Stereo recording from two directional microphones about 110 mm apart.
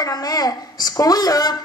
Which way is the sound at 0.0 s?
35° left (ahead or behind).